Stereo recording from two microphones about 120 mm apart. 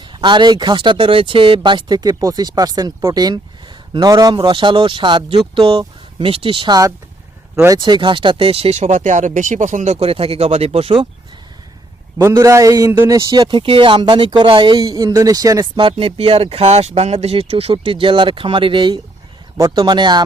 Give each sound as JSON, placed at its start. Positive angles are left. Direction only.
{"t": 0.0, "sound": "speech", "side_deg": -40}
{"t": 7.5, "sound": "speech", "side_deg": -25}
{"t": 7.8, "sound": "speech", "side_deg": -40}
{"t": 12.2, "sound": "speech", "side_deg": -25}
{"t": 19.5, "sound": "speech", "side_deg": -30}